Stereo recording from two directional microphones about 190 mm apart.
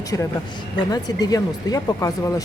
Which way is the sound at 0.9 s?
20° left (ahead or behind).